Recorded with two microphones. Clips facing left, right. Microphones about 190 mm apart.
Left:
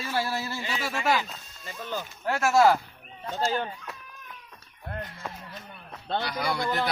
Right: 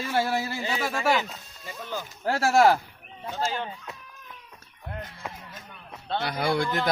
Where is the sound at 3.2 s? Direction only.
10° right (ahead or behind).